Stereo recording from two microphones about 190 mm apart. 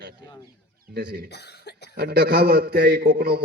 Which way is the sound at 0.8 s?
55° right (ahead or behind).